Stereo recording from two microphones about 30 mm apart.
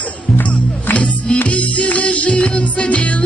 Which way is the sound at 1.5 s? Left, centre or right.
Left.